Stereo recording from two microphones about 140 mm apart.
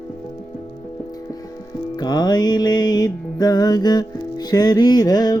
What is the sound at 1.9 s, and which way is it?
Music, 30° left (ahead or behind).